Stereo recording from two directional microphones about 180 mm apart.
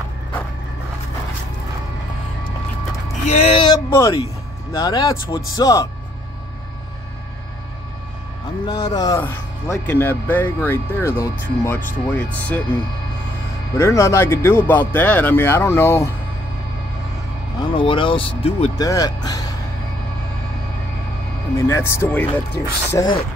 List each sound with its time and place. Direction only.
3.3 s speech: 35° left (ahead or behind)
3.7 s speech: 20° left (ahead or behind)
8.6 s speech: 25° left (ahead or behind)
9.2 s speech: 10° left (ahead or behind)
13.7 s speech: 15° left (ahead or behind)
17.6 s speech: 30° left (ahead or behind)
18.8 s speech: 20° left (ahead or behind)
21.5 s speech: 15° left (ahead or behind)